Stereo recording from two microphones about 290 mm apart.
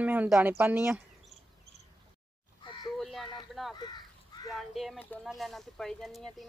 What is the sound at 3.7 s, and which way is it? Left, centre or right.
Crow, centre.